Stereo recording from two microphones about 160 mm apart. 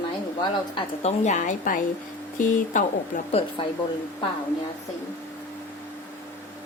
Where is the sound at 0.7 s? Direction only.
45° left (ahead or behind).